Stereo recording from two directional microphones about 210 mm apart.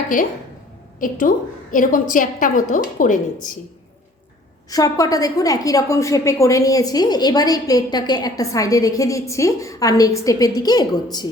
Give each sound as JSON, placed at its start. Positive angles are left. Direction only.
{"t": 0.9, "sound": "a woman's voice", "side_deg": 40}
{"t": 4.7, "sound": "a woman's voice", "side_deg": 15}